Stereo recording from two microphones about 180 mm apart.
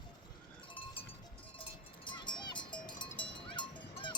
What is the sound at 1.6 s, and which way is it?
Cowbell, 25° left (ahead or behind).